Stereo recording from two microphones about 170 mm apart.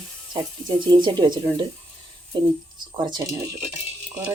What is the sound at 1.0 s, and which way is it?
Speech, 25° right (ahead or behind).